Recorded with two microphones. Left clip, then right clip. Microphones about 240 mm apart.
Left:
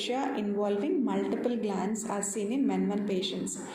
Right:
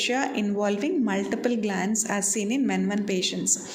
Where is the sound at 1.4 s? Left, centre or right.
Right.